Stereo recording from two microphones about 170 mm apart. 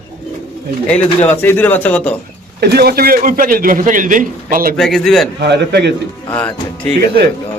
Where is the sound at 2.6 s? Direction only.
70° right (ahead or behind); by 4.7 s 50° right (ahead or behind).